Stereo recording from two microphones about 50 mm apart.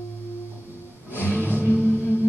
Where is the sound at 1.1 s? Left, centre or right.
Left.